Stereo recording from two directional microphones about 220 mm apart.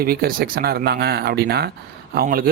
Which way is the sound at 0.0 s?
45° right (ahead or behind).